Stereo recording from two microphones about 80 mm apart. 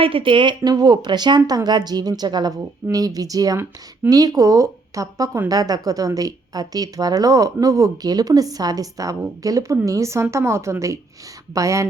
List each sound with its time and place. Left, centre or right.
0.1 s speech: right
2.9 s a woman's voice: right